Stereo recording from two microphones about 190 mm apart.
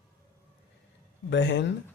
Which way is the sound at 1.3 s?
70° left (ahead or behind).